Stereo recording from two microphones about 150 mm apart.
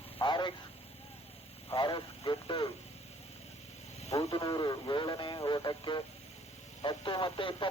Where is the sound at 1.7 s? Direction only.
35° left (ahead or behind).